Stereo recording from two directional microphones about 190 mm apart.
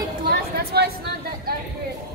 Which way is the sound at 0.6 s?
55° right (ahead or behind).